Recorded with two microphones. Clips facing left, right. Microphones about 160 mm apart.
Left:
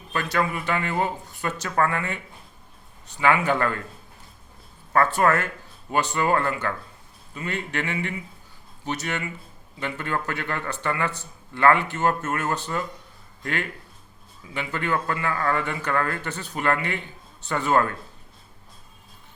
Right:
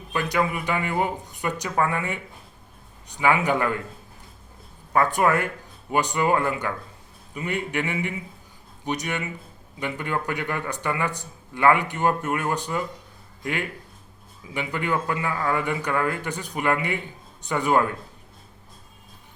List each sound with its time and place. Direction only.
0.1 s a man's voice: 15° right (ahead or behind)
4.9 s a man's voice: 15° right (ahead or behind)